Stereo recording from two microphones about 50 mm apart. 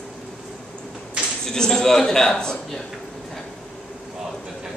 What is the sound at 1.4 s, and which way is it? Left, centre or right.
Speech, centre.